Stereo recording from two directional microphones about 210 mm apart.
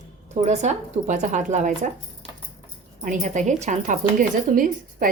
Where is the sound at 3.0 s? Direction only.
35° right (ahead or behind).